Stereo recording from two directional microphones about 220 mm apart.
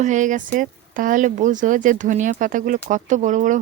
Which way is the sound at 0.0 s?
35° right (ahead or behind).